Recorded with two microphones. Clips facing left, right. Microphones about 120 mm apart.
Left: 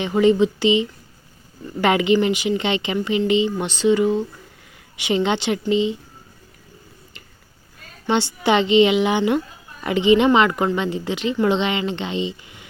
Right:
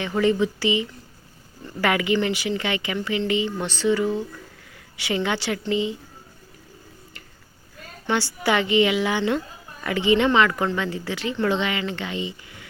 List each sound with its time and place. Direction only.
0.0 s speech: 20° left (ahead or behind)
8.0 s speech: 20° left (ahead or behind)